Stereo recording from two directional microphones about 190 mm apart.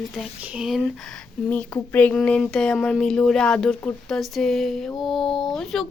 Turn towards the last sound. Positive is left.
turn(degrees=0)  # may be behind; listen again after turning